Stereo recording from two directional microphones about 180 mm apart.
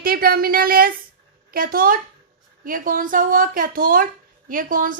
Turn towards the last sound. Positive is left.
turn(degrees=-50)  # may be behind; listen again after turning